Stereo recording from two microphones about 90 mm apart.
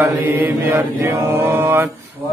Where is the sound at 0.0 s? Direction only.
25° right (ahead or behind).